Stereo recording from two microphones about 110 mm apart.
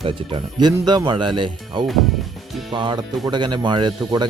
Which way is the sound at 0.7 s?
30° right (ahead or behind).